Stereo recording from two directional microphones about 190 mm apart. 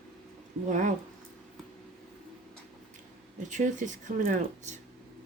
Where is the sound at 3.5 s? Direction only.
40° right (ahead or behind).